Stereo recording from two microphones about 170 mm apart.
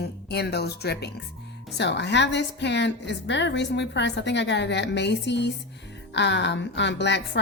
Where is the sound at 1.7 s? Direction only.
90° left.